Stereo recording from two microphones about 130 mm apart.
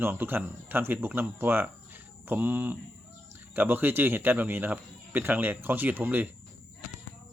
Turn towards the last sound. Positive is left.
turn(degrees=-15)  # may be behind; listen again after turning